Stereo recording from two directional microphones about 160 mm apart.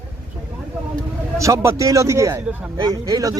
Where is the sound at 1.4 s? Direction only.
20° right (ahead or behind).